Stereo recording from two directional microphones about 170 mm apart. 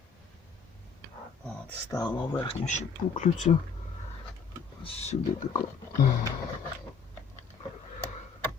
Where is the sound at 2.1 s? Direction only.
25° left (ahead or behind).